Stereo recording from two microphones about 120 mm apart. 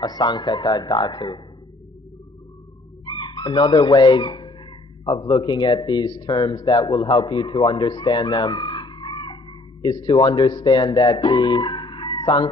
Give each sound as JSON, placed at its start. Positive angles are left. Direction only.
{"t": 0.0, "sound": "a man's voice", "side_deg": 35}
{"t": 3.1, "sound": "a man's voice", "side_deg": 40}
{"t": 8.3, "sound": "speech", "side_deg": 30}
{"t": 12.2, "sound": "chicken", "side_deg": 40}